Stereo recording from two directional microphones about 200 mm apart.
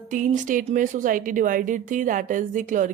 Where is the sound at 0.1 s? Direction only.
40° right (ahead or behind).